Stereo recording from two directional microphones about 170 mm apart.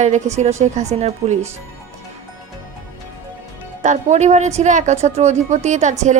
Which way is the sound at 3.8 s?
45° right (ahead or behind).